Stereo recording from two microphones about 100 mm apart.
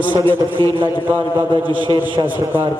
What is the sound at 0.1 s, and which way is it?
Speech, 55° right (ahead or behind).